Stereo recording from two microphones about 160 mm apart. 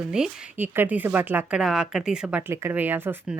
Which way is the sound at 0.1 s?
10° right (ahead or behind).